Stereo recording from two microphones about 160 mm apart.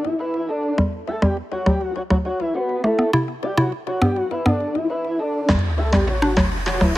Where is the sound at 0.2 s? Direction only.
Centre (ahead or behind).